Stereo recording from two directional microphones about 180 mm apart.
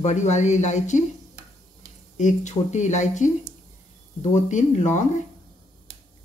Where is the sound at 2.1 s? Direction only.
40° left (ahead or behind).